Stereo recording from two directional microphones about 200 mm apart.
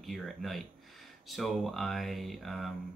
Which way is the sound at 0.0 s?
Centre (ahead or behind).